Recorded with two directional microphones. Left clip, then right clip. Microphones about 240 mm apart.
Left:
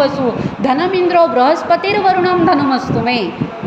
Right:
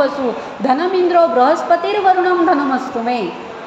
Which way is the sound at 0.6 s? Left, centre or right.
Left.